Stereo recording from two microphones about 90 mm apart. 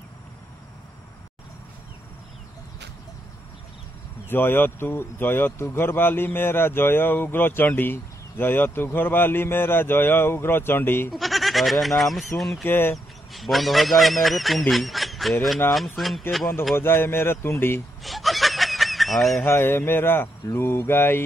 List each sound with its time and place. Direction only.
4.3 s speech: 25° left (ahead or behind)
11.1 s speech: centre (ahead or behind)
12.6 s speech: 25° left (ahead or behind)
12.9 s speech: centre (ahead or behind)
16.7 s speech: 25° left (ahead or behind)
18.0 s snicker: centre (ahead or behind)
19.4 s speech: 25° left (ahead or behind)